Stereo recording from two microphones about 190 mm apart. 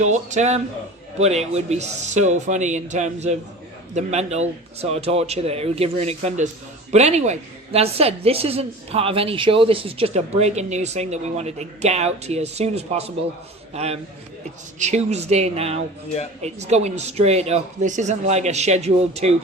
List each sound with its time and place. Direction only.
0.0 s a woman's voice: 40° right (ahead or behind)